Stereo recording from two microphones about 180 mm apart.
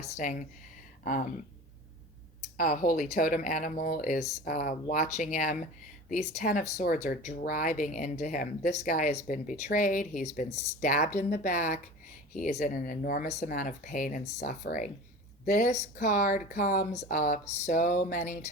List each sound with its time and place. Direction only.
0.2 s speech: 45° left (ahead or behind)
2.6 s speech: 50° left (ahead or behind)